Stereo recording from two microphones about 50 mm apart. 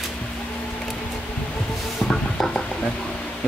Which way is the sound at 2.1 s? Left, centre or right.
Centre.